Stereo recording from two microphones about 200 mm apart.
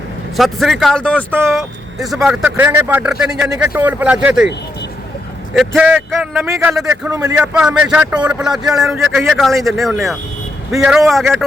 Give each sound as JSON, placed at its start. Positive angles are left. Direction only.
{"t": 0.3, "sound": "speech", "side_deg": 0}
{"t": 1.3, "sound": "speech", "side_deg": -10}
{"t": 5.5, "sound": "speech", "side_deg": -5}
{"t": 7.1, "sound": "speech", "side_deg": -20}
{"t": 7.3, "sound": "speech", "side_deg": -5}